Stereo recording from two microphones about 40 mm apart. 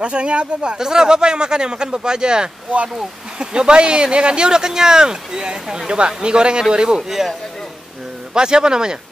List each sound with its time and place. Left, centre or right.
0.0 s speech: right
7.0 s a man's voice: centre
8.4 s speech: centre